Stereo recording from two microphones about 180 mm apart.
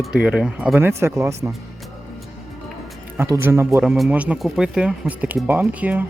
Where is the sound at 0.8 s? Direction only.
15° right (ahead or behind).